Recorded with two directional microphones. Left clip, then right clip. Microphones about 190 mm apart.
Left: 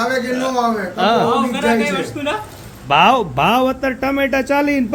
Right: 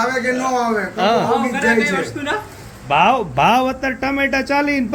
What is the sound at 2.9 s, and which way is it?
Speech, 15° left (ahead or behind).